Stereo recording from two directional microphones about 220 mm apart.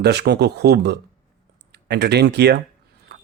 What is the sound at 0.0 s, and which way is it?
Speech, 50° right (ahead or behind).